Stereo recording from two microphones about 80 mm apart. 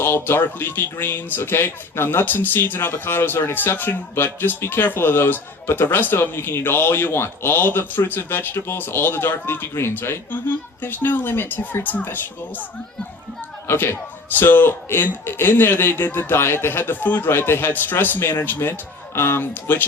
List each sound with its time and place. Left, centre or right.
0.0 s speech: left
13.7 s speech: left